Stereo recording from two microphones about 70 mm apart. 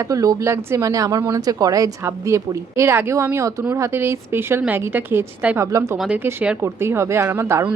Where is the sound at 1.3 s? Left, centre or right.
Right.